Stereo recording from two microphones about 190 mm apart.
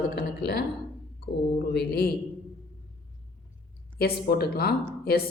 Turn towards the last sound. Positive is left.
turn(degrees=55)  # may be behind; listen again after turning